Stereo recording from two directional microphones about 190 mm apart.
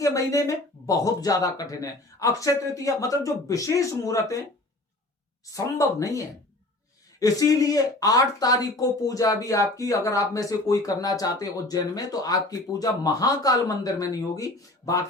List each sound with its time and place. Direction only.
0.0 s speech: 15° left (ahead or behind)
5.5 s speech: 15° left (ahead or behind)